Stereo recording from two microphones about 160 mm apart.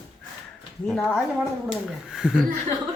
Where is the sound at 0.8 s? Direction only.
5° left (ahead or behind).